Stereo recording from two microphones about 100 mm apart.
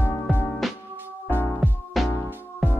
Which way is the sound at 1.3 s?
20° left (ahead or behind).